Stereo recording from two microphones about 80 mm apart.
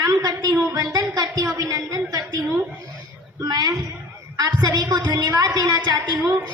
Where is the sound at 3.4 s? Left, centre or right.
Right.